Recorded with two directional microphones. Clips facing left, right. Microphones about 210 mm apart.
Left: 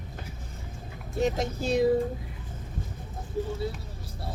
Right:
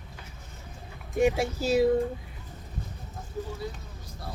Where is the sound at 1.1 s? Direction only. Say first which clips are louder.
Right 3 dB; 10° right (ahead or behind).